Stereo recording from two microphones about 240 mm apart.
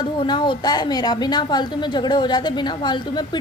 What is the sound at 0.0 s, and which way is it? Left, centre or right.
A woman's voice, centre.